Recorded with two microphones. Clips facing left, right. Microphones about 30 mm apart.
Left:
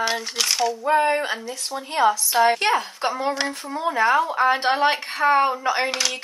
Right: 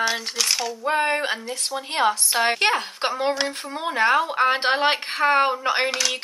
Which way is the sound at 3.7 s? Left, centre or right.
Right.